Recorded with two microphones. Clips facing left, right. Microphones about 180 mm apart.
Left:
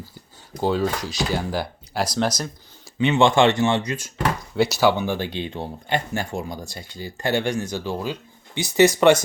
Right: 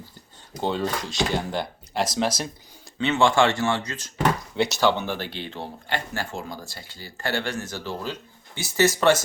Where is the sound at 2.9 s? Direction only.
15° left (ahead or behind).